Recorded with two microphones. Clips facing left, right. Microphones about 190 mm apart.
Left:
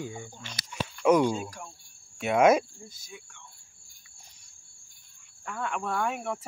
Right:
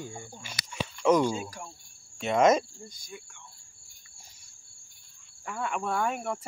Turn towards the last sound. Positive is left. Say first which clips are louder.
# right 1 dB
turn(degrees=0)  # may be behind; listen again after turning